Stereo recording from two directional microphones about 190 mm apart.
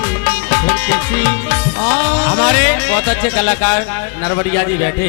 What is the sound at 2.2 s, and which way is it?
Speech, 15° left (ahead or behind).